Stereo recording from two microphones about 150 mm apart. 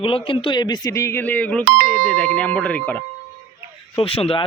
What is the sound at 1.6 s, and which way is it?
Speech, 70° right (ahead or behind).